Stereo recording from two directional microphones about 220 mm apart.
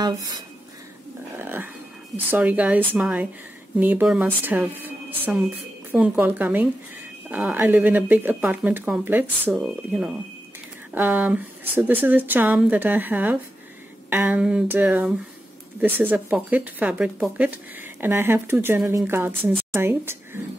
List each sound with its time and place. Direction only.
0.0 s speech: 20° right (ahead or behind)
1.4 s livestock: 10° right (ahead or behind)
2.1 s speech: 5° right (ahead or behind)